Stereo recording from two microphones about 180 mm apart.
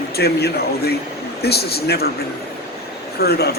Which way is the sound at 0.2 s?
60° left (ahead or behind).